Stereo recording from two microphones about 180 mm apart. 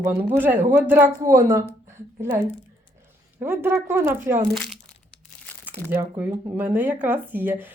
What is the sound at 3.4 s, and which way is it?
Speech, 10° right (ahead or behind).